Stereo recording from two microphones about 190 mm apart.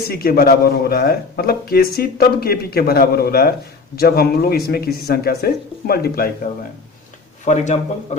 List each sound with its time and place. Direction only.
0.1 s speech: 50° left (ahead or behind)
7.4 s speech: 40° left (ahead or behind)